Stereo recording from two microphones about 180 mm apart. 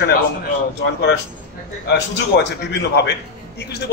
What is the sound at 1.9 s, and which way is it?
A man's voice, 70° left (ahead or behind).